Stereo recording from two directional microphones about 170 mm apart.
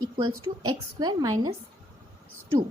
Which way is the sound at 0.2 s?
25° right (ahead or behind).